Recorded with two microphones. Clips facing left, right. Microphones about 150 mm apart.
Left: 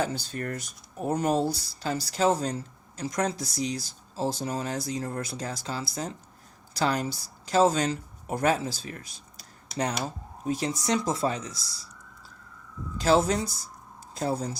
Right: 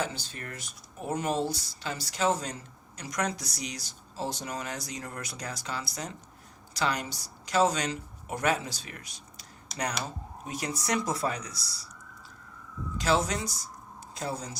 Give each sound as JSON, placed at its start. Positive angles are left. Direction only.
{"t": 0.0, "sound": "speech", "side_deg": 40}
{"t": 13.0, "sound": "speech", "side_deg": 30}